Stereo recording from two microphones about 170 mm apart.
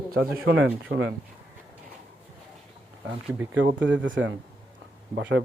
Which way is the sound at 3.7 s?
90° right.